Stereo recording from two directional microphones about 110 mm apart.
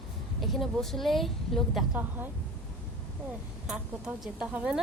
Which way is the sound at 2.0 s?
15° right (ahead or behind).